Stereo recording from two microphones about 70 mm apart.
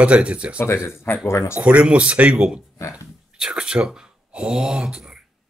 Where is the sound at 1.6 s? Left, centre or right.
Centre.